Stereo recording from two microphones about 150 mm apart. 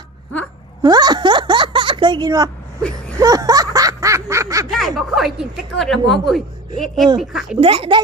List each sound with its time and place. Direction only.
0.8 s a sound: 25° right (ahead or behind)
3.2 s snicker: 25° right (ahead or behind)
4.7 s speech: centre (ahead or behind)
7.6 s speech: 35° right (ahead or behind)